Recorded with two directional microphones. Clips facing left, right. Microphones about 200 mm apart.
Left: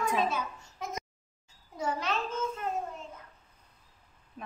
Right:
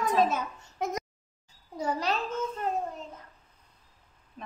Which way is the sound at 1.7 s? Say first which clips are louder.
Right 3 dB; 35° right (ahead or behind).